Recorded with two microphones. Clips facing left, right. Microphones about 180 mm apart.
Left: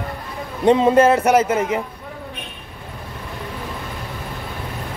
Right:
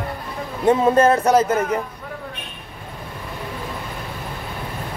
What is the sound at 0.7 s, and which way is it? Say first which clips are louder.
Speech: left 2 dB; 20° left (ahead or behind).